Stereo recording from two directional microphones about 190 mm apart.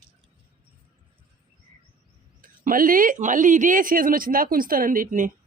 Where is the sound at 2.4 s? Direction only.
45° right (ahead or behind).